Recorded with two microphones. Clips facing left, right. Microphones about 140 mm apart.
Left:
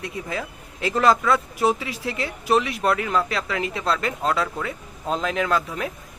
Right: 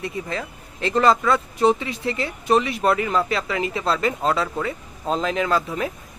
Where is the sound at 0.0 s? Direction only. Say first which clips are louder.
Right 2 dB; centre (ahead or behind).